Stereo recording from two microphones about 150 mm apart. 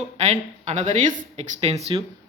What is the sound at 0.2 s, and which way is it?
Speech, 50° right (ahead or behind).